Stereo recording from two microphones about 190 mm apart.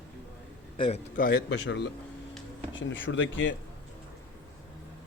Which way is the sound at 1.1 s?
50° left (ahead or behind).